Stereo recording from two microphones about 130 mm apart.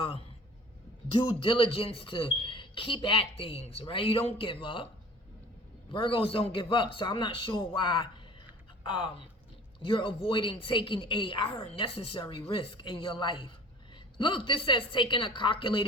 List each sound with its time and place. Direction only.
1.2 s speech: 40° left (ahead or behind)
5.9 s a woman's voice: 40° left (ahead or behind)